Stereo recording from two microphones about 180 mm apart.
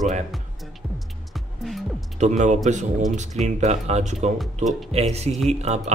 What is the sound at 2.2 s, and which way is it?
A man's voice, 40° right (ahead or behind).